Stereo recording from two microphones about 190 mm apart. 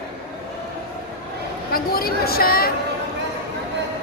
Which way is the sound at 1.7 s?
50° left (ahead or behind).